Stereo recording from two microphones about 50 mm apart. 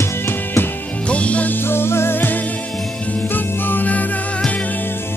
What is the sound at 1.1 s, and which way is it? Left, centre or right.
Music, left.